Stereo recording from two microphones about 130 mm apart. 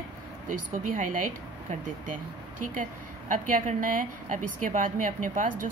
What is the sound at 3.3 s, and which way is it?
Speech, 90° right.